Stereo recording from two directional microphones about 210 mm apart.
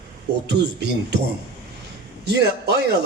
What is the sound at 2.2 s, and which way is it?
Speech, 50° right (ahead or behind).